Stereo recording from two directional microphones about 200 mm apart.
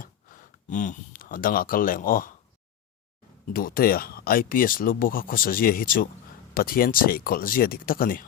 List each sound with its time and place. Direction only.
0.0 s speech: 45° left (ahead or behind)
3.4 s speech: 45° left (ahead or behind)